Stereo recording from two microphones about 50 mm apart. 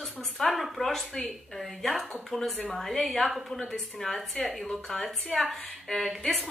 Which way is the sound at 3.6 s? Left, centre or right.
Centre.